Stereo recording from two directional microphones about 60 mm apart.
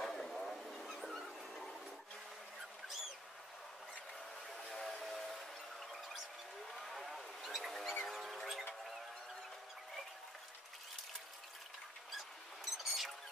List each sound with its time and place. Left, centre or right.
0.0 s dog: centre
4.6 s train: centre
5.0 s music: centre
6.7 s a sound: centre
12.2 s rodents: centre